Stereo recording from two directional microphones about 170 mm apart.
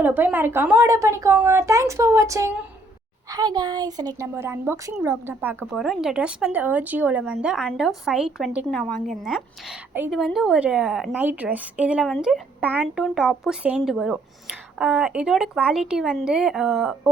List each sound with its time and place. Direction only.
0.0 s a woman's voice: 10° right (ahead or behind)
5.7 s speech: centre (ahead or behind)